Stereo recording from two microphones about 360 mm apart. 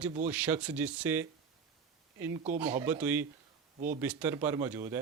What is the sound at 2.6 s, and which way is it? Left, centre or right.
Speech, centre.